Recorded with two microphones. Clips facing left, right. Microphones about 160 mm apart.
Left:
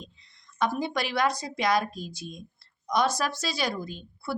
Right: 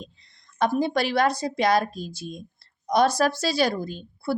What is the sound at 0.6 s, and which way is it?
A woman's voice, 35° right (ahead or behind).